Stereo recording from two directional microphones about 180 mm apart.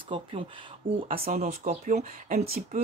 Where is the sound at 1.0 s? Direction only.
55° right (ahead or behind).